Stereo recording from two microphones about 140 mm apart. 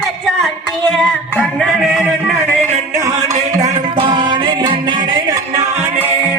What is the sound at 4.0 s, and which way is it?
Music, 35° right (ahead or behind).